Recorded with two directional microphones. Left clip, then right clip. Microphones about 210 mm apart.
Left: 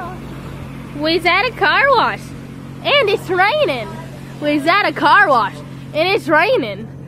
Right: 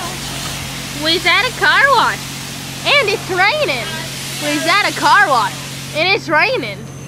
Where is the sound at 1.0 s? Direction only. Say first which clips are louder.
Right 1 dB; 15° left (ahead or behind).